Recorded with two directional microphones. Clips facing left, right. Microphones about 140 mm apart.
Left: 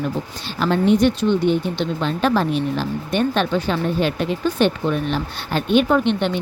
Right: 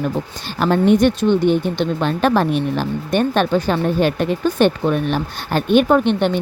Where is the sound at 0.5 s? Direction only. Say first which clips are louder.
Right 2 dB; 50° right (ahead or behind).